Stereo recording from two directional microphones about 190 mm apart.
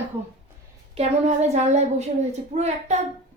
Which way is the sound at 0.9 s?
35° right (ahead or behind).